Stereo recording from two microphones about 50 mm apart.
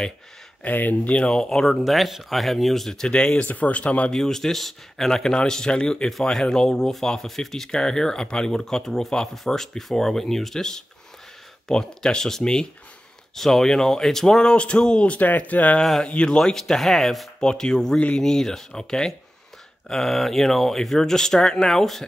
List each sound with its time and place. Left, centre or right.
0.7 s speech: left
1.3 s speech: centre
3.4 s speech: left
4.1 s speech: centre
15.1 s speech: left
16.1 s speech: centre
17.4 s speech: centre